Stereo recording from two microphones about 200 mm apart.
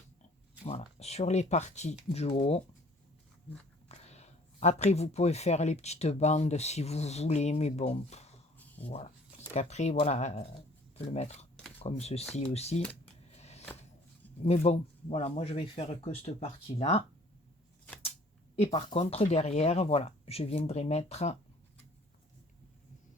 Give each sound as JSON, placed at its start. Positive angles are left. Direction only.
{"t": 0.6, "sound": "a sound", "side_deg": 35}
{"t": 0.9, "sound": "speech", "side_deg": 30}
{"t": 3.8, "sound": "speech", "side_deg": 35}
{"t": 9.6, "sound": "speech", "side_deg": 35}
{"t": 13.3, "sound": "a sound", "side_deg": 35}
{"t": 14.4, "sound": "speech", "side_deg": 30}
{"t": 18.6, "sound": "speech", "side_deg": 20}
{"t": 18.9, "sound": "speech", "side_deg": 35}